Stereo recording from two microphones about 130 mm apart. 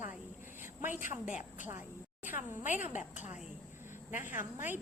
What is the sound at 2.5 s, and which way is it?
Speech, 15° right (ahead or behind).